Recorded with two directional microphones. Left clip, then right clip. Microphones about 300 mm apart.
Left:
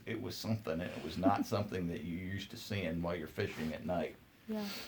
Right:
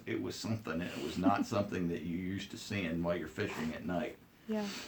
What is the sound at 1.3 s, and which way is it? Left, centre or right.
Speech, left.